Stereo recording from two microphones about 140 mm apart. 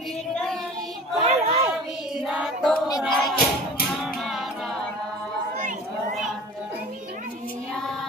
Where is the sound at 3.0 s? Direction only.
Centre (ahead or behind).